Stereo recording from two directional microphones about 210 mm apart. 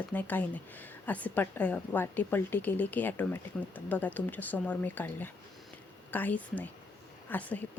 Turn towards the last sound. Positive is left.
turn(degrees=5)  # may be behind; listen again after turning